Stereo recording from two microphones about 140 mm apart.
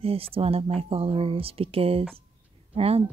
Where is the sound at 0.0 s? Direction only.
45° right (ahead or behind).